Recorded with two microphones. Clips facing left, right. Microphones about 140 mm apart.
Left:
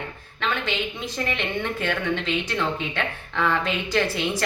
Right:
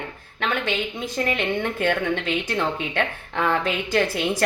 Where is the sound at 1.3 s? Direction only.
45° right (ahead or behind).